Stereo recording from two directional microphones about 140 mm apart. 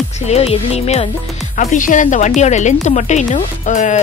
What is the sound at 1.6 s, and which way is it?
Speech, 65° left (ahead or behind).